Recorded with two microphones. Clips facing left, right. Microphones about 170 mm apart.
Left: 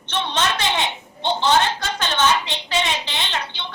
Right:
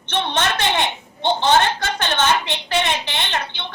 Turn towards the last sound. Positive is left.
turn(degrees=-60)  # may be behind; listen again after turning